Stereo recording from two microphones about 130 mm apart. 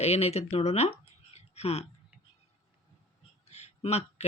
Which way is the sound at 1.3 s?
55° left (ahead or behind).